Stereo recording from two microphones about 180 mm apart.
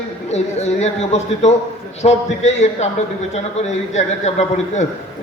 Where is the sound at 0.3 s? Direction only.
35° left (ahead or behind).